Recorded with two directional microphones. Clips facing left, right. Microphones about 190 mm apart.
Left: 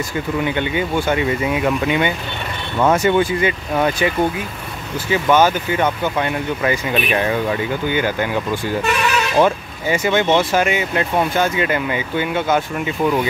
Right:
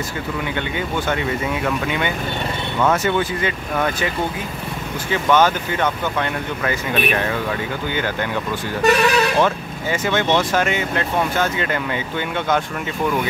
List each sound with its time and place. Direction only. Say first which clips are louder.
0.6 s speech: left 4 dB; 10° left (ahead or behind)
5.1 s speech: left 2 dB; 10° left (ahead or behind)
8.8 s speech: right 8 dB; 40° right (ahead or behind)
9.4 s speech: left 3 dB; 15° left (ahead or behind)